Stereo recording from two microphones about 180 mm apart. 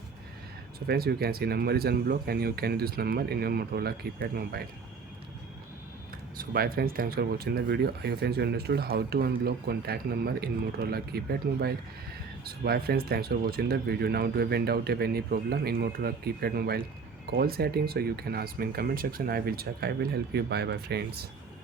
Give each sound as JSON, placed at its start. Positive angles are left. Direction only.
{"t": 0.9, "sound": "speech", "side_deg": -60}
{"t": 6.3, "sound": "speech", "side_deg": -55}